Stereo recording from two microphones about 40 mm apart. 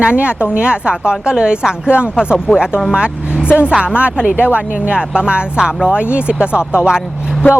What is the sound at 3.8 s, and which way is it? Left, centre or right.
Speech, right.